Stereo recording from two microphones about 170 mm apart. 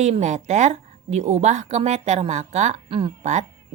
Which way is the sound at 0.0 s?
40° right (ahead or behind).